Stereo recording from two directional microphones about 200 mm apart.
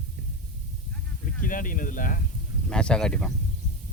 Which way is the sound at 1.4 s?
45° left (ahead or behind).